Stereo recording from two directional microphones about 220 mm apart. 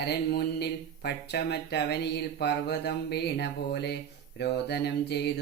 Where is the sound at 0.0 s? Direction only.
45° left (ahead or behind).